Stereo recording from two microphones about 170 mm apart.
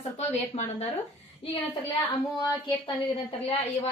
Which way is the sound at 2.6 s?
30° left (ahead or behind).